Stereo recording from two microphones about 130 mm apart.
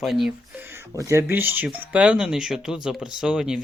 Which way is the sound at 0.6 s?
20° right (ahead or behind).